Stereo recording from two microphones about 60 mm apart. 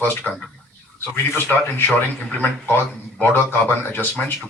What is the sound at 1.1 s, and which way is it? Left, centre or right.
Speech, left.